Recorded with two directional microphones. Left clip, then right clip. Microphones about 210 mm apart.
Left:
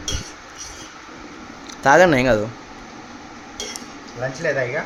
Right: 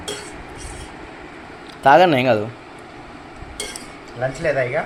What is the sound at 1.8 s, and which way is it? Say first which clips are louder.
Speech: right 1 dB; 15° left (ahead or behind).